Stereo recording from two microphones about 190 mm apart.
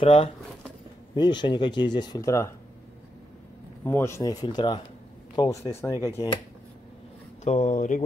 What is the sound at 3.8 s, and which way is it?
A man's voice, 10° left (ahead or behind).